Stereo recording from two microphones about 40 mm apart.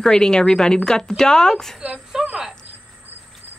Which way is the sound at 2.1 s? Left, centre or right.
Centre.